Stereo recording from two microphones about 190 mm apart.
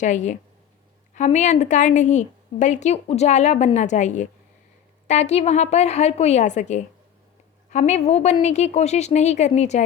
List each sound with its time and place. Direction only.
0.0 s a woman's voice: 40° left (ahead or behind)